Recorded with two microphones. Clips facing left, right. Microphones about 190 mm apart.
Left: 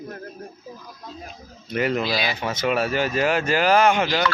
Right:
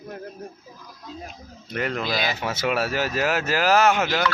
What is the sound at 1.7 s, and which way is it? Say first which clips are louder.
Speech: left 4 dB; 5° left (ahead or behind).